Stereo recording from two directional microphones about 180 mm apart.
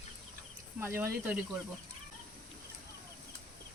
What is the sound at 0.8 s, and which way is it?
Speech, 10° right (ahead or behind).